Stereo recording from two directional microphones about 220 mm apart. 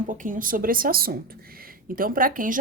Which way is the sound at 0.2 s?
40° right (ahead or behind).